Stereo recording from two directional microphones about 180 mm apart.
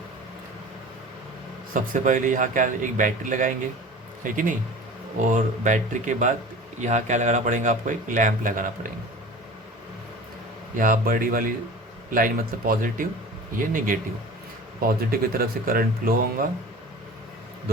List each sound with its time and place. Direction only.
1.7 s speech: 45° right (ahead or behind)
10.8 s speech: 50° right (ahead or behind)